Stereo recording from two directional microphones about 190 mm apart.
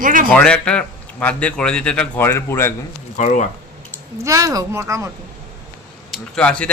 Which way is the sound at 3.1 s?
40° left (ahead or behind).